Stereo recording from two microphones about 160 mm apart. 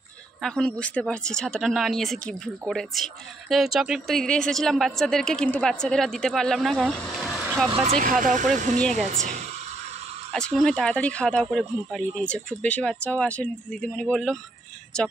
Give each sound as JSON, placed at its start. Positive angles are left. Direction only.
{"t": 0.4, "sound": "speech", "side_deg": 5}
{"t": 7.7, "sound": "speech", "side_deg": -35}
{"t": 8.0, "sound": "speech", "side_deg": -55}
{"t": 10.3, "sound": "speech", "side_deg": 5}